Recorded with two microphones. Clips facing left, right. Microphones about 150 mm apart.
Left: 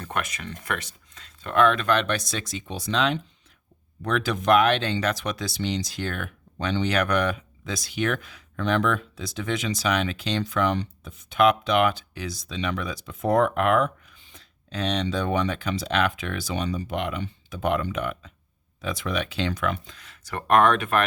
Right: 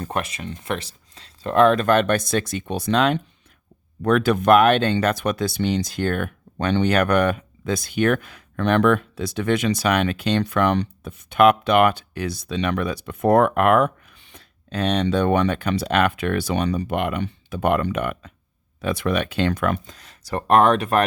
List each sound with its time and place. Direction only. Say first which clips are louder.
0.0 s speech: right 4 dB; 30° right (ahead or behind)